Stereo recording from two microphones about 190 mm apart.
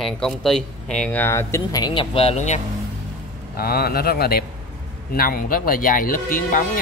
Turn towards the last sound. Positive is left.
turn(degrees=45)  # may be behind; listen again after turning